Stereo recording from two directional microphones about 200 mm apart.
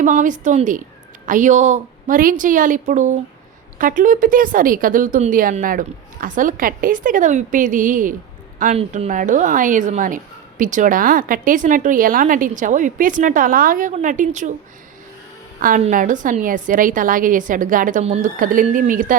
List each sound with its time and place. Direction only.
0.0 s a woman's voice: 40° right (ahead or behind)
15.6 s a woman's voice: 40° right (ahead or behind)